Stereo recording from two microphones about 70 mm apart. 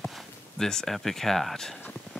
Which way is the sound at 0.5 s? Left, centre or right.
Centre.